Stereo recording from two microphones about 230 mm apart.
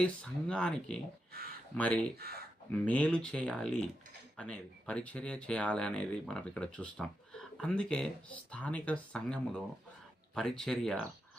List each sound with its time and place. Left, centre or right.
0.0 s speech: centre
1.3 s speech: right
1.7 s speech: centre
2.1 s speech: right
2.7 s speech: centre